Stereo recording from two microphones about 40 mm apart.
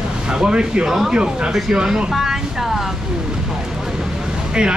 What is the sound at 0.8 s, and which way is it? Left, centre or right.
Speech, centre.